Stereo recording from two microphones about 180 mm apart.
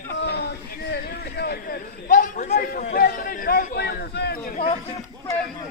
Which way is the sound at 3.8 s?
65° left (ahead or behind).